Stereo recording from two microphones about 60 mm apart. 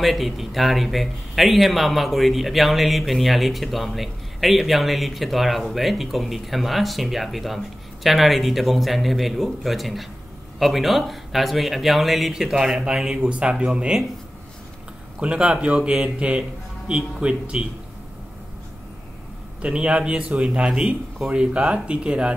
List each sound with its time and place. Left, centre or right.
0.0 s a man's voice: centre
13.3 s speech: centre
15.1 s a man's voice: centre
19.6 s speech: centre